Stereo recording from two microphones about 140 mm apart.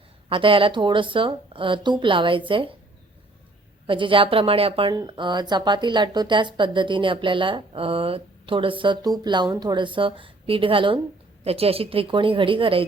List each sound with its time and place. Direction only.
0.3 s speech: 40° right (ahead or behind)
3.8 s speech: 35° right (ahead or behind)